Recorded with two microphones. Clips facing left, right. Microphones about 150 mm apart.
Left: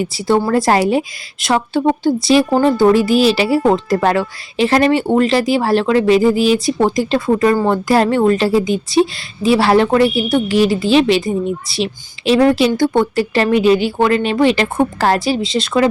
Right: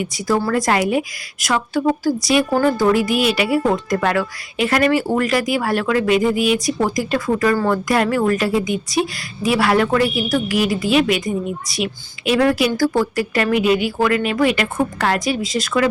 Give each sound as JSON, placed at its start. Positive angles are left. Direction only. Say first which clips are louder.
{"t": 0.0, "sound": "a woman's voice", "louder": "left 4 dB", "side_deg": 30}